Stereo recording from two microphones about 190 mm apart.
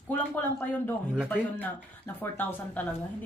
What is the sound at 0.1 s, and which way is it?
Speech, 10° left (ahead or behind).